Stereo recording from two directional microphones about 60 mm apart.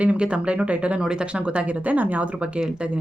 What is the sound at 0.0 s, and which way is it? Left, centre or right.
Speech, centre.